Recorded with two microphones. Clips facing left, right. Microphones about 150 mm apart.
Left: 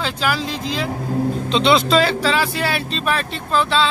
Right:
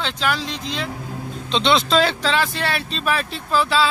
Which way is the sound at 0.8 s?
40° left (ahead or behind).